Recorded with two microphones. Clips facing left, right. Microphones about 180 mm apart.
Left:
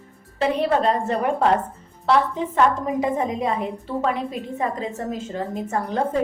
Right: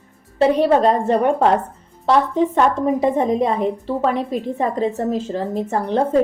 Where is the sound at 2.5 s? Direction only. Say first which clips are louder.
Left 2 dB; 35° right (ahead or behind).